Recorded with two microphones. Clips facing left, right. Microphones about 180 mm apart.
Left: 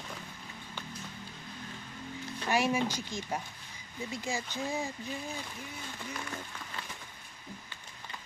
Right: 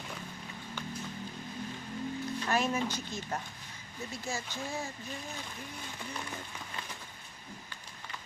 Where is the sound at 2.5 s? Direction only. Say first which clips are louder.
Left 3 dB; 10° left (ahead or behind).